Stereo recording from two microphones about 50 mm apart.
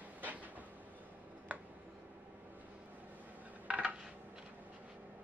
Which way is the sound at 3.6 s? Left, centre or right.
Right.